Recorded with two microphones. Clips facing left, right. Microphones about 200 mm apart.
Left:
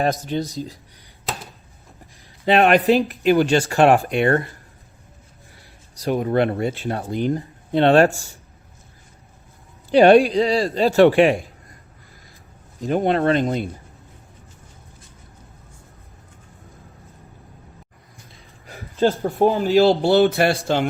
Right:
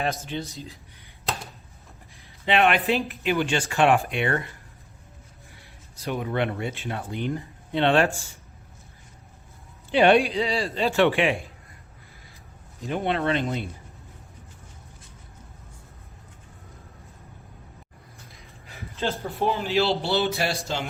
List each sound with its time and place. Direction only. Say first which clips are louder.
0.0 s speech: left 7 dB; 40° left (ahead or behind)
2.4 s speech: left 6 dB; 40° left (ahead or behind)
5.9 s speech: left 8 dB; 40° left (ahead or behind)
9.9 s speech: left 7 dB; 40° left (ahead or behind)
12.8 s speech: left 7 dB; 40° left (ahead or behind)
18.6 s speech: left 10 dB; 40° left (ahead or behind); by 20.6 s 55° left (ahead or behind)